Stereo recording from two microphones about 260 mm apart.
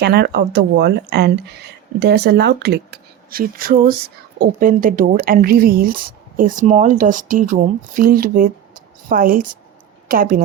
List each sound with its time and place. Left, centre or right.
0.0 s speech: right